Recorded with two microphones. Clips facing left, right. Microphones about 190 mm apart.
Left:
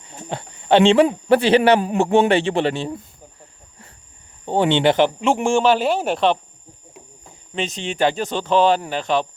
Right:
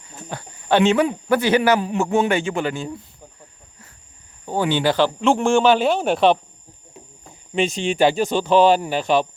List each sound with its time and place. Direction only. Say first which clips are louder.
0.3 s speech: left 3 dB; 25° left (ahead or behind)
4.4 s speech: left 3 dB; 25° left (ahead or behind)
5.2 s speech: right 1 dB; 10° left (ahead or behind)
6.1 s speech: right 2 dB; 10° right (ahead or behind)
7.5 s speech: right 5 dB; 10° right (ahead or behind)